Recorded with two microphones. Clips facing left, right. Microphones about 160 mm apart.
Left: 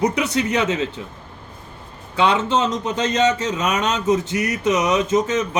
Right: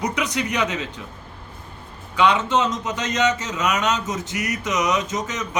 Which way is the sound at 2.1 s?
30° left (ahead or behind).